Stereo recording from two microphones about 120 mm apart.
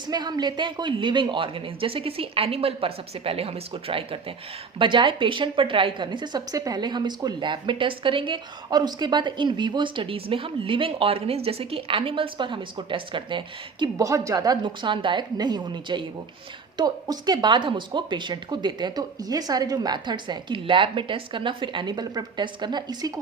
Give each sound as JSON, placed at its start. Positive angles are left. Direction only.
{"t": 0.1, "sound": "a woman's voice", "side_deg": -35}
{"t": 14.0, "sound": "speech", "side_deg": -25}